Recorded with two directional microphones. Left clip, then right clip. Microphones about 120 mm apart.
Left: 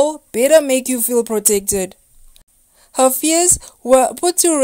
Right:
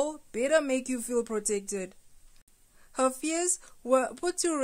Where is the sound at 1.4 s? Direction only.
30° left (ahead or behind).